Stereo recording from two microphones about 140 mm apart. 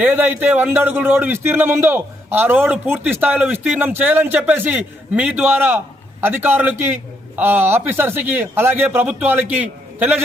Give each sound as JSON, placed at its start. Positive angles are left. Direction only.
{"t": 0.0, "sound": "speech", "side_deg": -15}